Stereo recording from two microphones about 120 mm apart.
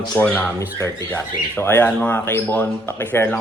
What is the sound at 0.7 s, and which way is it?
A man's voice, 20° left (ahead or behind).